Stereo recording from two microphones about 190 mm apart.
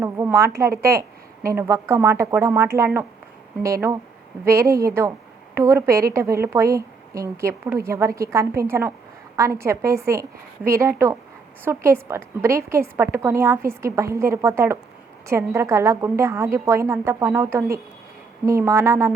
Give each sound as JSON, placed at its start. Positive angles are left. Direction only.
{"t": 0.0, "sound": "a woman's voice", "side_deg": -15}